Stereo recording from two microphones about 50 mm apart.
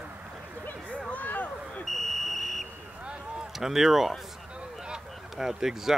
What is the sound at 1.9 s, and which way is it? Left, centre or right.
Buzzer, centre.